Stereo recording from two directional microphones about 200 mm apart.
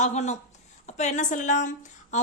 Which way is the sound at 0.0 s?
35° left (ahead or behind).